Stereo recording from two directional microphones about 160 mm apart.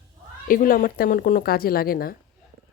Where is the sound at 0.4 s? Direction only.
60° left (ahead or behind).